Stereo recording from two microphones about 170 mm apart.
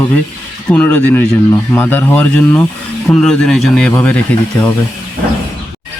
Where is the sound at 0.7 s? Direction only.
5° left (ahead or behind).